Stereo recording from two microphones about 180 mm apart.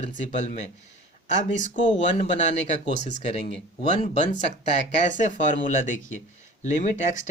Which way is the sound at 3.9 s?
40° left (ahead or behind).